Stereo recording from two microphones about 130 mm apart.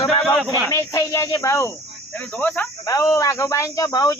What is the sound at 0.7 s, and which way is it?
Speech, 20° left (ahead or behind).